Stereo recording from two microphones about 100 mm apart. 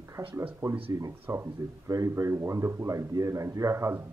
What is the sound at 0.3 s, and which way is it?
Speech, 25° right (ahead or behind).